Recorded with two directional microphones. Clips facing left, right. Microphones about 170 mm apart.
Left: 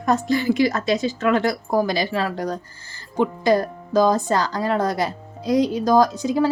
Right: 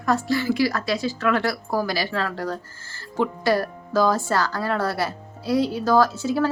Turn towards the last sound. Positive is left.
turn(degrees=15)  # may be behind; listen again after turning